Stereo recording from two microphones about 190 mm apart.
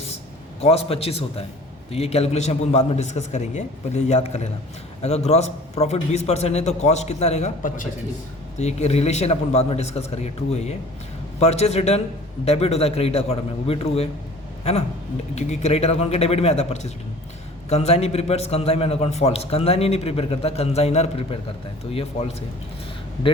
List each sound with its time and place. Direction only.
0.6 s a man's voice: 30° left (ahead or behind)